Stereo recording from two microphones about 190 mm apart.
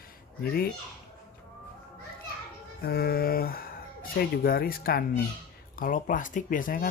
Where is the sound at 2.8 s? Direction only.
55° left (ahead or behind).